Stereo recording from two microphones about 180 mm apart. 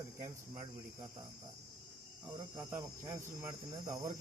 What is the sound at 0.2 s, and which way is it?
Cricket, 25° right (ahead or behind).